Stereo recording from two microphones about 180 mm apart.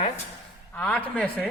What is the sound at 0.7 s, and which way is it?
Speech, 10° left (ahead or behind).